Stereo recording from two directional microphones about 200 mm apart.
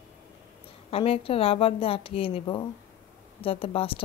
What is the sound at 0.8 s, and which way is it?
A woman's voice, 30° left (ahead or behind).